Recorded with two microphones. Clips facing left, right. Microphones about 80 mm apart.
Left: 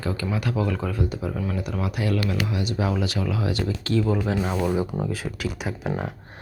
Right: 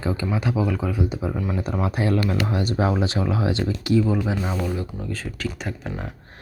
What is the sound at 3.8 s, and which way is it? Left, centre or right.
Speech, centre.